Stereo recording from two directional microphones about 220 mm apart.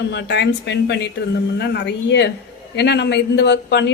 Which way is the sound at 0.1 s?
50° left (ahead or behind).